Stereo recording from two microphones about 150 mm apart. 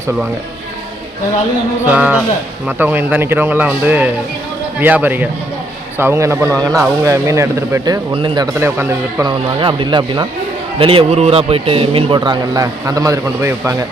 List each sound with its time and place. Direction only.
1.8 s speech: 10° right (ahead or behind)
8.1 s a man's voice: 30° right (ahead or behind)
8.5 s speech: 15° right (ahead or behind)
9.2 s a man's voice: 35° right (ahead or behind)